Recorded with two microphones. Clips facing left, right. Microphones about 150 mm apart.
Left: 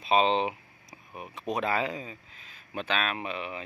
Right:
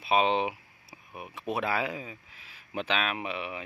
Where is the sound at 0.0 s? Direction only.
10° right (ahead or behind).